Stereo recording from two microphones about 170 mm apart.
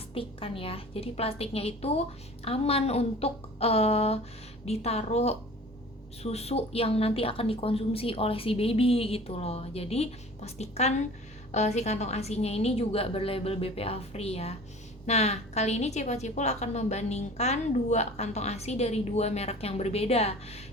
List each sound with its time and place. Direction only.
0.1 s a woman's voice: 35° left (ahead or behind)